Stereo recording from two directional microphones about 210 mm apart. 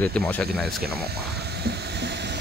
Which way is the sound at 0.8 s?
50° right (ahead or behind).